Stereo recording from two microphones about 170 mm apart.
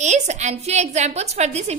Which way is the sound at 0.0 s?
45° right (ahead or behind).